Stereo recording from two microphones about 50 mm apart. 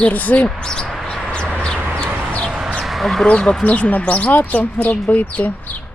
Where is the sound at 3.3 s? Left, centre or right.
Centre; by 5.5 s left.